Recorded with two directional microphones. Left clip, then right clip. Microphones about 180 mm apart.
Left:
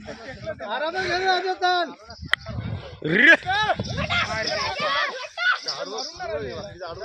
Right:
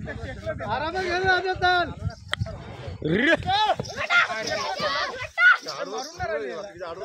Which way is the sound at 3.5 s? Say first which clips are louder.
Even; 45° left (ahead or behind).